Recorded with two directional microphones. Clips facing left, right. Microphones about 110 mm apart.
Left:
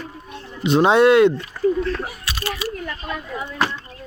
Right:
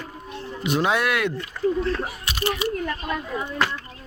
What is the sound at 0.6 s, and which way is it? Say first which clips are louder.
Speech: left 9 dB; 25° left (ahead or behind).